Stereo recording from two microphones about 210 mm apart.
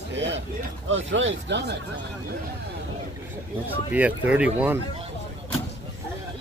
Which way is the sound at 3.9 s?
5° right (ahead or behind).